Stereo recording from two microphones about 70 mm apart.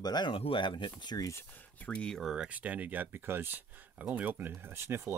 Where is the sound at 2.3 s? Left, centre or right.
Centre.